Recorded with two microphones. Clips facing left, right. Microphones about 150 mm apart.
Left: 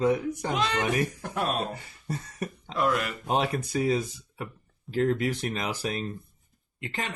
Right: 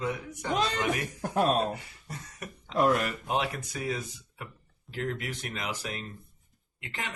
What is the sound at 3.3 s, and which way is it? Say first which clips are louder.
Speech: left 7 dB; 35° left (ahead or behind).